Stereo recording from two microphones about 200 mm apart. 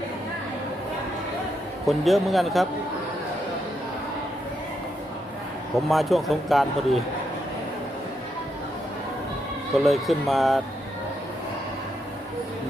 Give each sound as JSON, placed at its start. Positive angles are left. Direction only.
{"t": 1.9, "sound": "speech", "side_deg": 0}
{"t": 5.7, "sound": "speech", "side_deg": 0}
{"t": 9.7, "sound": "speech", "side_deg": 0}